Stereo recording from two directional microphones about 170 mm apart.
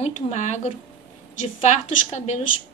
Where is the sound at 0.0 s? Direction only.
40° left (ahead or behind).